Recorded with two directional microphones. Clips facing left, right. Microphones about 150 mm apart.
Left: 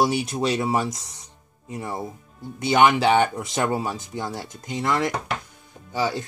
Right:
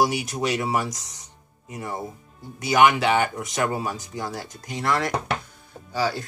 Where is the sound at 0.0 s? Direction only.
25° left (ahead or behind).